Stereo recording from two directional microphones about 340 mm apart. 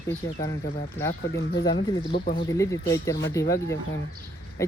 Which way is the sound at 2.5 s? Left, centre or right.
Centre.